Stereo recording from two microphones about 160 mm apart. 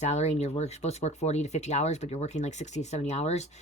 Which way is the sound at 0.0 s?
45° left (ahead or behind).